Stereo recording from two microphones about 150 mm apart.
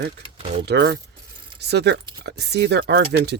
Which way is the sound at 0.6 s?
90° right.